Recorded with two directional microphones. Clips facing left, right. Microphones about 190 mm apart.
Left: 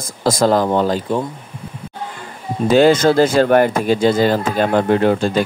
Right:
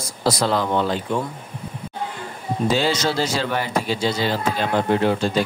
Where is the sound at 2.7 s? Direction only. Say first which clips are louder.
Left 11 dB; 55° left (ahead or behind).